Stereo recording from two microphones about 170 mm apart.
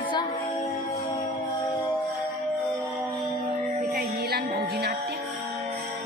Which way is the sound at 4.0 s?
70° right (ahead or behind).